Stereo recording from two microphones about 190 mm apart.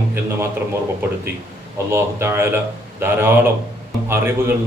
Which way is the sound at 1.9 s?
15° right (ahead or behind).